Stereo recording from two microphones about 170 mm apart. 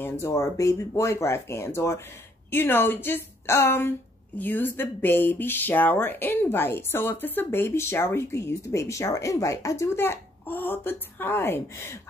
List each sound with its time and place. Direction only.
0.0 s speech: 15° left (ahead or behind)